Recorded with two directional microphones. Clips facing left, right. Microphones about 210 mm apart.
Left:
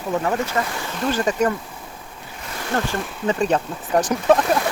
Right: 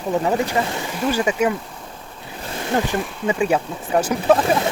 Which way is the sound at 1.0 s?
10° right (ahead or behind).